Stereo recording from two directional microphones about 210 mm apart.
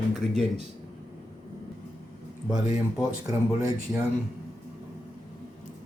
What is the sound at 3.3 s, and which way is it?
Speech, 15° right (ahead or behind).